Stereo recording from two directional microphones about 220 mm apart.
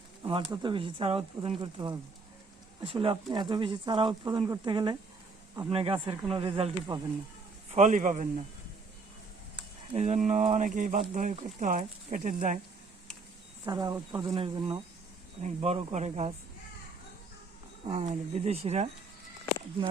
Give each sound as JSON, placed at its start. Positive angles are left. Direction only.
{"t": 0.2, "sound": "pigeon", "side_deg": -25}
{"t": 0.5, "sound": "speech", "side_deg": -20}
{"t": 7.7, "sound": "speech", "side_deg": -35}
{"t": 9.9, "sound": "speech", "side_deg": -30}
{"t": 13.7, "sound": "speech", "side_deg": -15}
{"t": 17.8, "sound": "speech", "side_deg": -30}